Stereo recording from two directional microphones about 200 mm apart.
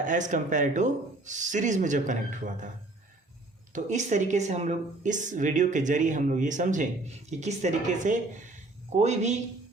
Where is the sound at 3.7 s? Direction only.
35° right (ahead or behind).